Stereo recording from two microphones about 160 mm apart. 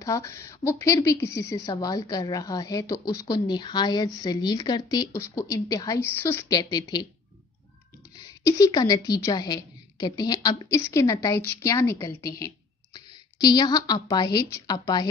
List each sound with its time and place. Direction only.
0.0 s speech: 20° left (ahead or behind)
6.5 s speech: 25° left (ahead or behind)
8.5 s a woman's voice: 20° left (ahead or behind)